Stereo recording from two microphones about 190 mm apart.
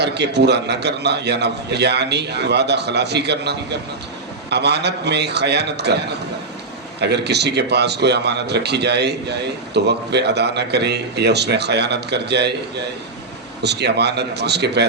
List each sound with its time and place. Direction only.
0.0 s a man's voice: 60° right (ahead or behind)
13.6 s a man's voice: 60° right (ahead or behind)